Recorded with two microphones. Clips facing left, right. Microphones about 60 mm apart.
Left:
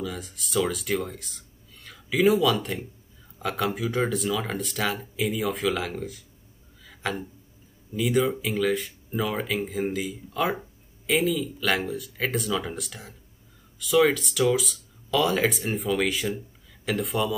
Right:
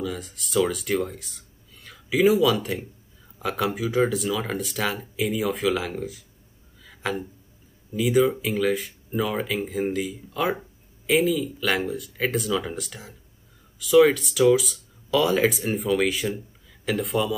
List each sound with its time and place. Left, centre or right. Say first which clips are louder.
0.0 s speech: right 3 dB; centre
6.9 s a sound: right 2 dB; centre
7.9 s speech: right 3 dB; centre